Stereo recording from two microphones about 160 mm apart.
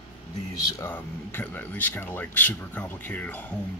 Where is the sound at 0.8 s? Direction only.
10° left (ahead or behind).